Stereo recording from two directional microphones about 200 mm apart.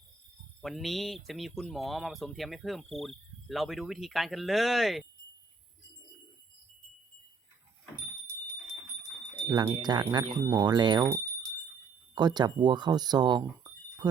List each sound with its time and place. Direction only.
0.6 s speech: centre (ahead or behind)
9.4 s a sound: 20° right (ahead or behind)
9.7 s speech: 20° right (ahead or behind)